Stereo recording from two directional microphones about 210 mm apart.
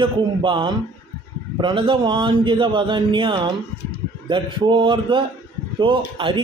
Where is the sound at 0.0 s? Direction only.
25° right (ahead or behind).